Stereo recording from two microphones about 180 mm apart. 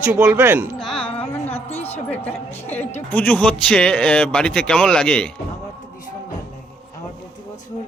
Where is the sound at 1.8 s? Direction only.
10° left (ahead or behind).